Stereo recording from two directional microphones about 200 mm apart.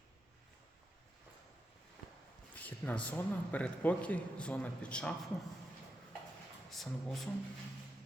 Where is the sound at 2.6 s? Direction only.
10° left (ahead or behind).